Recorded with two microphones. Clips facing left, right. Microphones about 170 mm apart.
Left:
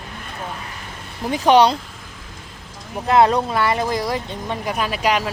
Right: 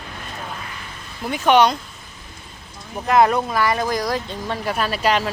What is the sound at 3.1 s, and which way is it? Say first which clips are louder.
A woman's voice: left 1 dB; 25° left (ahead or behind).